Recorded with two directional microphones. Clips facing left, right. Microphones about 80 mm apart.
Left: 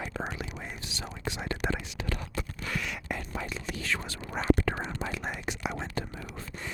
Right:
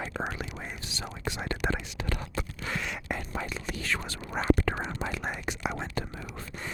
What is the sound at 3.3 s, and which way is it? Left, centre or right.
Whispering, right.